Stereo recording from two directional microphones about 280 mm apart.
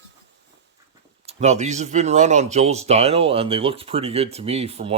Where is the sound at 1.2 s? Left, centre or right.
Right.